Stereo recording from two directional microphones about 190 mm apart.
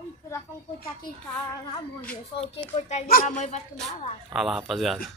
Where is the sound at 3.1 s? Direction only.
45° left (ahead or behind).